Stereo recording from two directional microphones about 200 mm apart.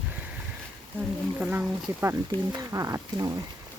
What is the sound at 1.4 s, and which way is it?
Speech, 10° right (ahead or behind).